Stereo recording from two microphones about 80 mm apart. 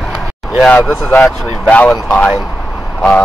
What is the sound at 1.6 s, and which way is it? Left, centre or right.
Speech, centre.